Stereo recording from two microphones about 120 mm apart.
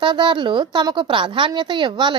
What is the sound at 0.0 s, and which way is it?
A woman's voice, 40° right (ahead or behind).